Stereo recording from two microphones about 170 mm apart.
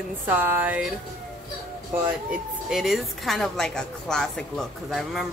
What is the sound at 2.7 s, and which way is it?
A woman's voice, centre (ahead or behind).